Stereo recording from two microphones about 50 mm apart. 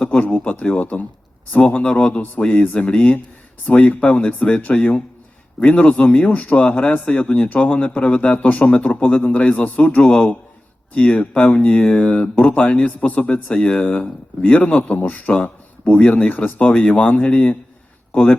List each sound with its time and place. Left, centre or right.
0.1 s speech: left